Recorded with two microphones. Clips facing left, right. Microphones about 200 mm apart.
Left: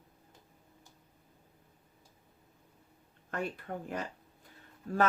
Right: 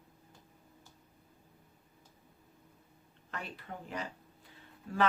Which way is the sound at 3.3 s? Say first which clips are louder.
Left 7 dB; 50° left (ahead or behind).